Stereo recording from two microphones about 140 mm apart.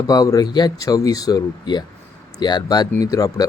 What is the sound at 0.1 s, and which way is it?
Speech, 25° left (ahead or behind).